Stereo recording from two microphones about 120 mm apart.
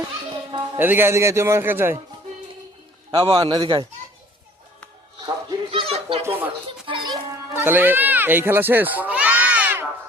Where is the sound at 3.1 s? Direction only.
50° right (ahead or behind).